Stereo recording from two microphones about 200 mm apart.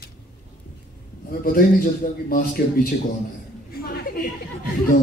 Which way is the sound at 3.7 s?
50° left (ahead or behind).